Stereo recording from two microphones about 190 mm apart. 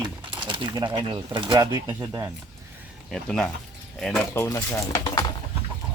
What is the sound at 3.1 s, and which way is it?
Speech, 5° left (ahead or behind).